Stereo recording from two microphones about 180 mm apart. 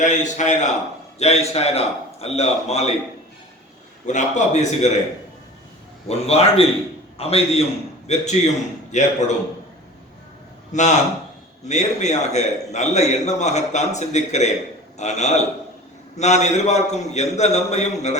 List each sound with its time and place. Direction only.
0.0 s a man's voice: 45° left (ahead or behind)
4.0 s a man's voice: 40° left (ahead or behind)
6.1 s a man's voice: 35° left (ahead or behind)
10.7 s a man's voice: 40° left (ahead or behind)